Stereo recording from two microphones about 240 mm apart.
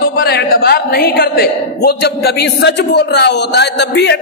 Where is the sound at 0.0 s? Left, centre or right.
Left.